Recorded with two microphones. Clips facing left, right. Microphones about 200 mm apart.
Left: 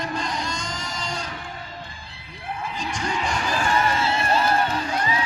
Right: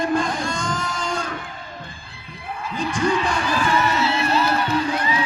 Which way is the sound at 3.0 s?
55° right (ahead or behind).